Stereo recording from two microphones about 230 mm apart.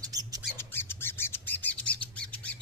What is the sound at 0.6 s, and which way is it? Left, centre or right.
Bird, centre.